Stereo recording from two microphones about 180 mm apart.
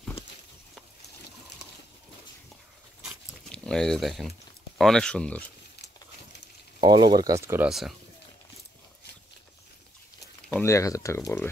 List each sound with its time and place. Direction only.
3.0 s dog: centre (ahead or behind)
4.7 s speech: centre (ahead or behind)
6.8 s speech: 25° right (ahead or behind)
10.5 s speech: 15° left (ahead or behind)